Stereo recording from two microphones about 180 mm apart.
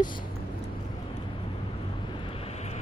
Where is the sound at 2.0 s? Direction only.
25° left (ahead or behind).